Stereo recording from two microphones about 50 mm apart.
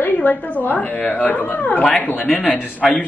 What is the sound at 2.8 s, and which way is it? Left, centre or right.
Speech, centre.